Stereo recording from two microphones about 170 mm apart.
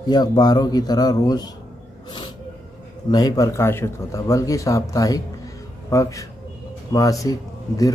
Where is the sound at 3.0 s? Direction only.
25° left (ahead or behind).